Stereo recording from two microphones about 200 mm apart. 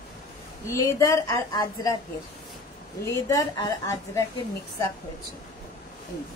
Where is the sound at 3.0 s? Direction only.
15° left (ahead or behind).